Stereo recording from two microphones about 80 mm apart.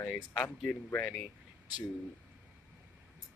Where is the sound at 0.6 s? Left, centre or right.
Left.